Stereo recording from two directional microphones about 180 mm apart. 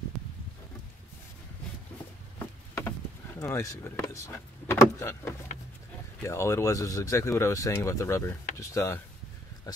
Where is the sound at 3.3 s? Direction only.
15° left (ahead or behind).